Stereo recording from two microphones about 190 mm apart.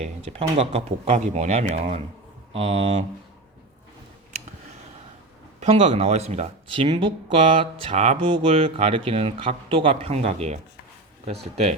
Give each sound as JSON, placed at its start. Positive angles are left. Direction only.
{"t": 0.0, "sound": "speech", "side_deg": -30}
{"t": 5.5, "sound": "speech", "side_deg": -35}